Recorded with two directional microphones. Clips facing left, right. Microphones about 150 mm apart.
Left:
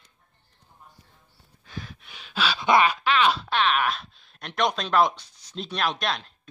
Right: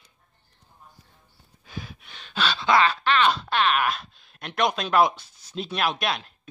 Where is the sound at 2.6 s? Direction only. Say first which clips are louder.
Left 1 dB; 15° left (ahead or behind).